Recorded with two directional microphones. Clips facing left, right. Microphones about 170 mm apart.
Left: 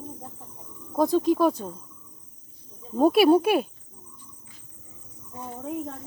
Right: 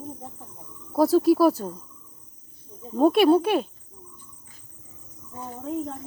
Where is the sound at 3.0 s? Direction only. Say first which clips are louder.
Even; 5° left (ahead or behind).